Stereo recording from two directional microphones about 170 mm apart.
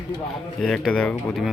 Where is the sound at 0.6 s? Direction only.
Centre (ahead or behind).